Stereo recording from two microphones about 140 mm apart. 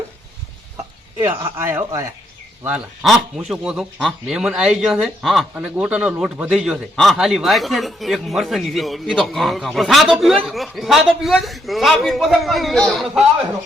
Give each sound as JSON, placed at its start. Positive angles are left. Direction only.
{"t": 1.5, "sound": "speech", "side_deg": -15}
{"t": 2.6, "sound": "a man's voice", "side_deg": -5}
{"t": 5.5, "sound": "a man's voice", "side_deg": -10}